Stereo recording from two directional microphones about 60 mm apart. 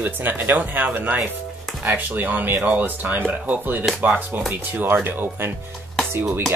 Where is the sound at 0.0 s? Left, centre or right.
Right.